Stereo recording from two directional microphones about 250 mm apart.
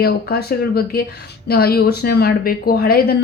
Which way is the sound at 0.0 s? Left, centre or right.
Left.